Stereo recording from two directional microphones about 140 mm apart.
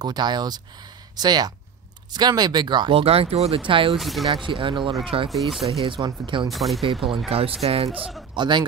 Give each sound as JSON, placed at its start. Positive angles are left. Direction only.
{"t": 0.0, "sound": "speech", "side_deg": -30}
{"t": 3.0, "sound": "speech", "side_deg": -45}
{"t": 3.9, "sound": "speech", "side_deg": 0}
{"t": 4.5, "sound": "speech", "side_deg": -35}
{"t": 5.3, "sound": "speech", "side_deg": 0}
{"t": 5.7, "sound": "speech", "side_deg": -40}
{"t": 6.5, "sound": "speech", "side_deg": 0}
{"t": 6.8, "sound": "speech", "side_deg": -45}
{"t": 8.4, "sound": "speech", "side_deg": -35}